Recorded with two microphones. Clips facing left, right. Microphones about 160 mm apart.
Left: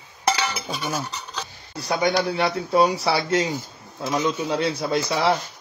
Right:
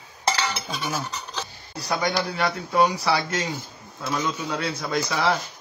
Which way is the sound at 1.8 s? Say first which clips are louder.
Left 4 dB; 25° left (ahead or behind).